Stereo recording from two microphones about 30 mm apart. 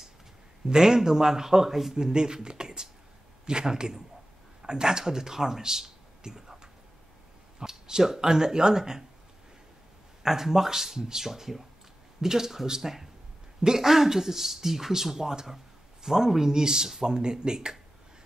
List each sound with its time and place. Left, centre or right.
0.7 s speech: right
2.1 s speech: right
10.2 s speech: centre